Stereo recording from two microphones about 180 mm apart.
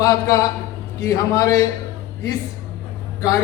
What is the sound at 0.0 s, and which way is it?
A man's voice, 20° left (ahead or behind).